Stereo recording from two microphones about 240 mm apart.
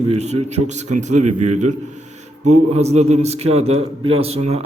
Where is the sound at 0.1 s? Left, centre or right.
Right.